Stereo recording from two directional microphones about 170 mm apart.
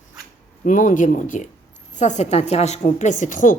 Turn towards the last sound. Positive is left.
turn(degrees=50)  # may be behind; listen again after turning